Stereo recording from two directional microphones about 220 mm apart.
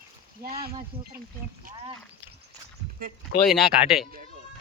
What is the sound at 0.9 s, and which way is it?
Speech, 25° right (ahead or behind).